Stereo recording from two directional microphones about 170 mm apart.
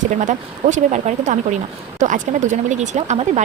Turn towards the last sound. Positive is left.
turn(degrees=-40)  # may be behind; listen again after turning